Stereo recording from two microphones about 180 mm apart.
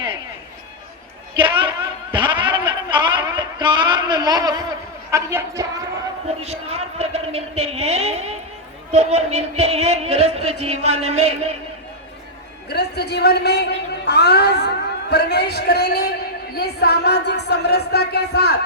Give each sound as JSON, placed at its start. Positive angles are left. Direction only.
{"t": 1.4, "sound": "a sound", "side_deg": -30}
{"t": 5.1, "sound": "a woman's voice", "side_deg": -15}
{"t": 6.4, "sound": "speech", "side_deg": -35}
{"t": 12.6, "sound": "a man's voice", "side_deg": 65}